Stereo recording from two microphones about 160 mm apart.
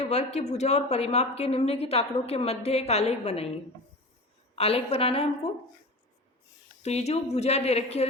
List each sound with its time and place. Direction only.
0.0 s a woman's voice: 45° left (ahead or behind)
4.5 s a woman's voice: 40° left (ahead or behind)
6.8 s a woman's voice: 45° left (ahead or behind)